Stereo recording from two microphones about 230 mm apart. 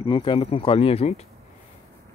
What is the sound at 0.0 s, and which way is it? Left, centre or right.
Speech, left.